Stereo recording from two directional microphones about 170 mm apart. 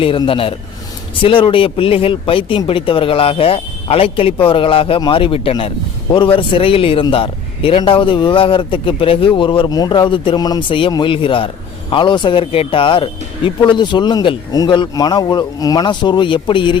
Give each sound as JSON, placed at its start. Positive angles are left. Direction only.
{"t": 0.0, "sound": "a man's voice", "side_deg": 30}